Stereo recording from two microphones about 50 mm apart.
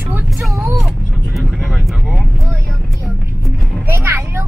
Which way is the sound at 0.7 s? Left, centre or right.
Centre.